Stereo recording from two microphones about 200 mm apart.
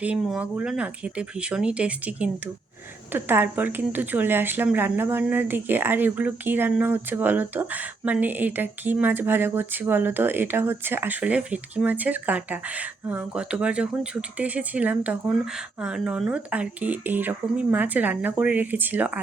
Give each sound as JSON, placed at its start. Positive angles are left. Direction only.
{"t": 0.0, "sound": "speech", "side_deg": -5}